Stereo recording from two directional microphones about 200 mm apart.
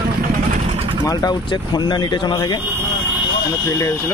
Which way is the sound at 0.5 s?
35° right (ahead or behind).